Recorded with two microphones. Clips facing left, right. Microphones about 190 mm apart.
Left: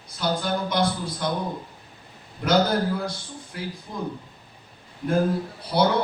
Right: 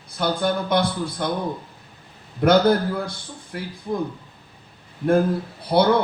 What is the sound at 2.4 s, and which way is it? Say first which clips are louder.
Speech: right 5 dB; 55° right (ahead or behind).